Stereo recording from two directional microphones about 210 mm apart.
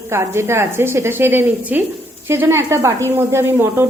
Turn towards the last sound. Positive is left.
turn(degrees=-10)  # may be behind; listen again after turning